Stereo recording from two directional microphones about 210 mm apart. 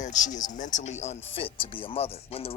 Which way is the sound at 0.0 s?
35° left (ahead or behind).